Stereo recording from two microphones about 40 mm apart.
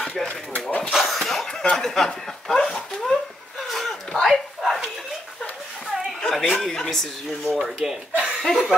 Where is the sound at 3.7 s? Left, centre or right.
Centre.